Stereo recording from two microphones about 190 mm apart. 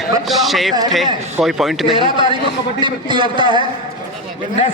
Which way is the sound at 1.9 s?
25° right (ahead or behind).